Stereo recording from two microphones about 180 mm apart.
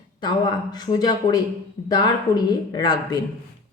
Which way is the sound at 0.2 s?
25° left (ahead or behind).